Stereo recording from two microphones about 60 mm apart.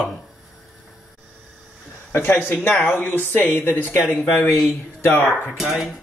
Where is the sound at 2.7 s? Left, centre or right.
Left.